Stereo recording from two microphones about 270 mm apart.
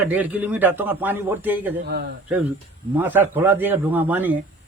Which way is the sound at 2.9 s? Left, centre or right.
Centre.